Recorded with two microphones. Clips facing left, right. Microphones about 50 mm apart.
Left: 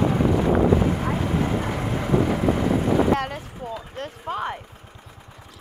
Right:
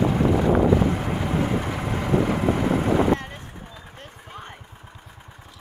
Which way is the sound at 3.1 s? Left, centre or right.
Left.